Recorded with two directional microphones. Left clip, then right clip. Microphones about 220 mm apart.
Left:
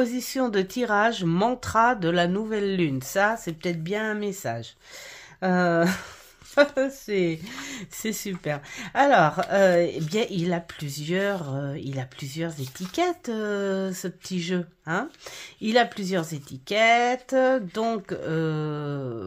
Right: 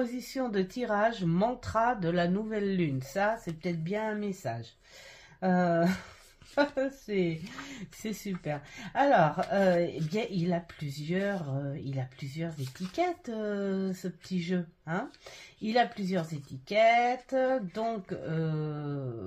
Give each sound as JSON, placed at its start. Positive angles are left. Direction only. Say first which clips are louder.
{"t": 0.0, "sound": "speech", "louder": "left 8 dB", "side_deg": 40}